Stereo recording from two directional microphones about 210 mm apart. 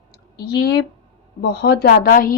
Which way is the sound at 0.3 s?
50° left (ahead or behind).